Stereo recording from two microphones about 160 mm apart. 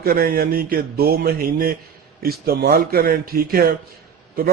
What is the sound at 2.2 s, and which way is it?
Speech, 80° right.